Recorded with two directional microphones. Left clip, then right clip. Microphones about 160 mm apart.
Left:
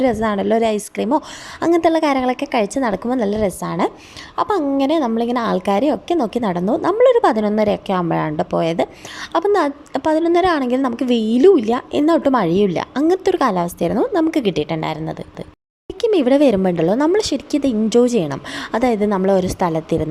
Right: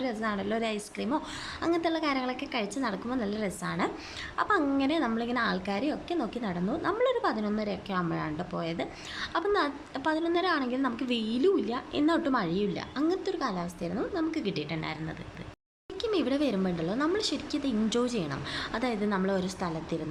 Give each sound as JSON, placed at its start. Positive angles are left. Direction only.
{"t": 0.0, "sound": "a woman's voice", "side_deg": 45}